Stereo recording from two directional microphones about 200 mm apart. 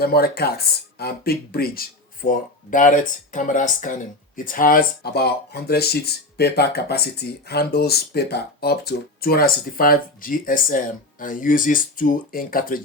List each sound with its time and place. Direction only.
0.0 s speech: 50° left (ahead or behind)